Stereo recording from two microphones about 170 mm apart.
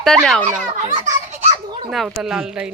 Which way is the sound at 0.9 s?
45° right (ahead or behind).